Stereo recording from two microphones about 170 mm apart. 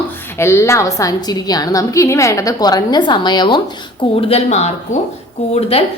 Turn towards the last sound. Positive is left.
turn(degrees=35)  # may be behind; listen again after turning